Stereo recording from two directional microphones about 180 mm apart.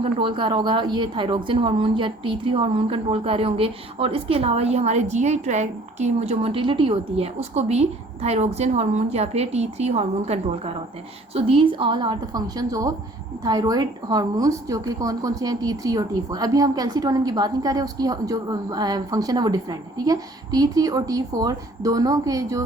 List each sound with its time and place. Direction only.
0.0 s a woman's voice: 30° right (ahead or behind)